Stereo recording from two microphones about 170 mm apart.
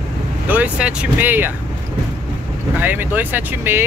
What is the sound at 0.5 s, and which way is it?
Speech, 10° right (ahead or behind).